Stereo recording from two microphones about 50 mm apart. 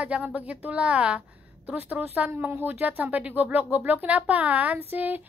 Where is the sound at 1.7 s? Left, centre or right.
Right.